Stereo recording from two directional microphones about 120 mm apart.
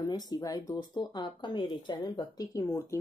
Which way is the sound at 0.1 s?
30° left (ahead or behind).